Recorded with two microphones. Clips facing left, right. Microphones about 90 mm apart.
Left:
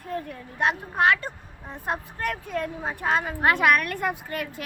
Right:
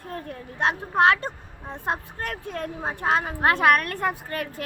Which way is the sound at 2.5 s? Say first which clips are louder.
Left 1 dB; 35° right (ahead or behind).